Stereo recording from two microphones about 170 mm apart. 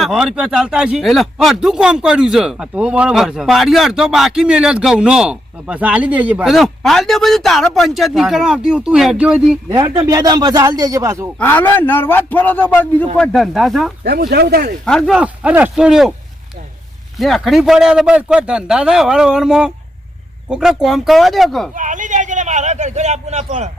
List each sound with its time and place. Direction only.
0.0 s speech: 5° right (ahead or behind)
9.6 s a man's voice: 25° right (ahead or behind)
11.3 s a man's voice: 10° left (ahead or behind)
14.0 s speech: 70° right (ahead or behind)
14.8 s speech: centre (ahead or behind)
17.2 s speech: centre (ahead or behind)
21.8 s a man's voice: 50° right (ahead or behind)